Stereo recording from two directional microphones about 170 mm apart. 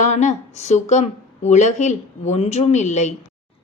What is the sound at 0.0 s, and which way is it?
Speech, 45° left (ahead or behind).